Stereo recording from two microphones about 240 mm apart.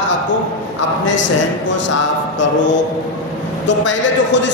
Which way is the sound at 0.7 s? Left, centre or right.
Left.